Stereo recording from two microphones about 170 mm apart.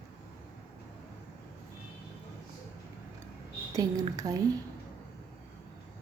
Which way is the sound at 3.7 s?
20° right (ahead or behind).